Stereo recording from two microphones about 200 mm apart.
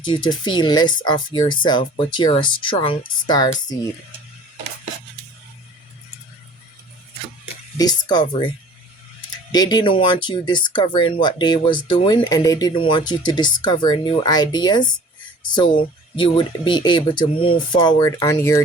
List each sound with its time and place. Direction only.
0.0 s speech: 25° left (ahead or behind)
7.8 s speech: 20° left (ahead or behind)
9.5 s speech: 20° left (ahead or behind)